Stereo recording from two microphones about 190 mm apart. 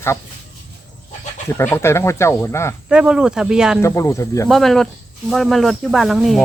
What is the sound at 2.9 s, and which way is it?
Speech, 5° right (ahead or behind).